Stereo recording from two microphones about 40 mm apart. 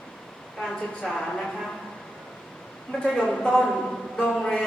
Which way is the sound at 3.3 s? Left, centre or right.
Left.